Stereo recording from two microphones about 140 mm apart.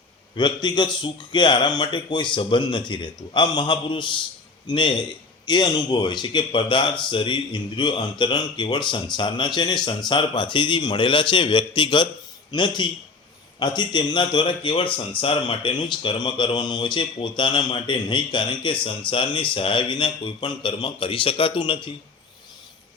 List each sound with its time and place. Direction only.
0.3 s speech: 30° left (ahead or behind)